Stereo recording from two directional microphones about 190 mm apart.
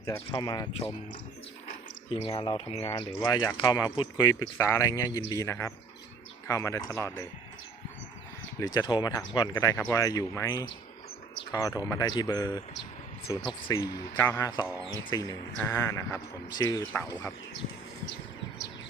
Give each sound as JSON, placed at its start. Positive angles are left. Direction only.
{"t": 0.3, "sound": "speech", "side_deg": 25}
{"t": 2.0, "sound": "speech", "side_deg": 30}
{"t": 8.5, "sound": "speech", "side_deg": 20}